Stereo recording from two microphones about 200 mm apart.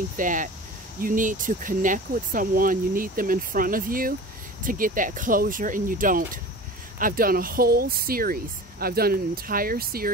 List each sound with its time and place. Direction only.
0.2 s speech: 40° right (ahead or behind)